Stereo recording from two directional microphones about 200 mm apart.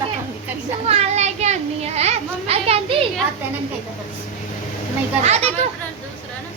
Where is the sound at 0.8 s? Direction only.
35° right (ahead or behind).